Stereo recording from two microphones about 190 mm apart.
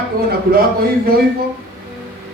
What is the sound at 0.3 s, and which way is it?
Speech, 55° right (ahead or behind).